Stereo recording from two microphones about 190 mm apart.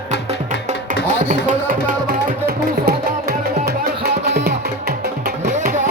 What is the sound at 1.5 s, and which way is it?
Music, 45° right (ahead or behind).